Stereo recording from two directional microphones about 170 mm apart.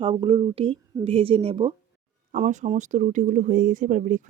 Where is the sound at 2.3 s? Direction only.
45° right (ahead or behind).